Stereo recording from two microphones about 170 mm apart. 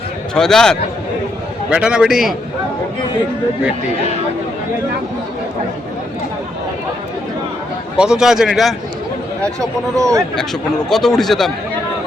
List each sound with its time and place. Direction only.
0.3 s speech: 5° left (ahead or behind)
7.9 s speech: 5° right (ahead or behind)
9.6 s speech: 20° right (ahead or behind)
10.8 s speech: 5° left (ahead or behind)